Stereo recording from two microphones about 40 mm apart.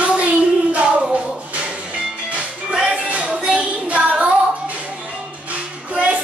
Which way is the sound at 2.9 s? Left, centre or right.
Right.